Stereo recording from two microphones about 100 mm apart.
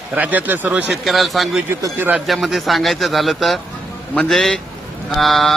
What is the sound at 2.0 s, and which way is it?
Speech, 15° right (ahead or behind).